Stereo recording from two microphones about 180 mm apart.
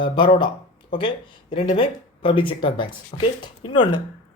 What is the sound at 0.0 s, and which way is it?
Speech, 25° left (ahead or behind).